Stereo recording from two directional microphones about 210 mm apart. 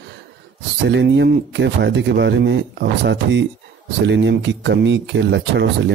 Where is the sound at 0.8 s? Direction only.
55° right (ahead or behind).